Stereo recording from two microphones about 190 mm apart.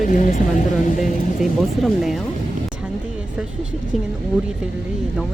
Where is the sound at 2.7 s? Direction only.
5° right (ahead or behind).